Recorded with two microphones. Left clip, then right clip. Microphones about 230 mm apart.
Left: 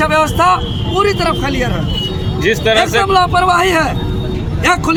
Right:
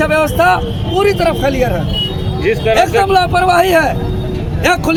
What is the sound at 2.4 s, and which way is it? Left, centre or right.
Speech, left.